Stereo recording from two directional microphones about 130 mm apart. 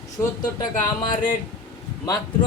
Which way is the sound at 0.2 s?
20° left (ahead or behind).